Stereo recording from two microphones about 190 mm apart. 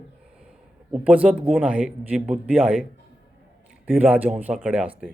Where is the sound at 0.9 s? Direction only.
5° right (ahead or behind).